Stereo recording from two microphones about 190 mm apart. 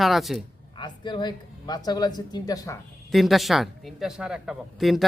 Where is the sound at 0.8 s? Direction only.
25° left (ahead or behind).